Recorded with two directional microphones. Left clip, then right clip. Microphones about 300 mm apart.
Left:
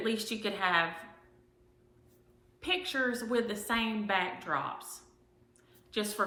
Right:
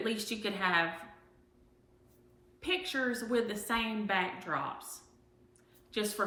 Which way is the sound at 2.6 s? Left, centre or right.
Centre.